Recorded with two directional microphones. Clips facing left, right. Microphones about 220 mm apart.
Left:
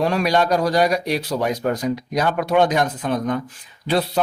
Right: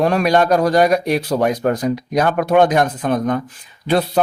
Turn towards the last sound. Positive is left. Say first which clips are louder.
# right 3 dB
turn(degrees=-55)  # may be behind; listen again after turning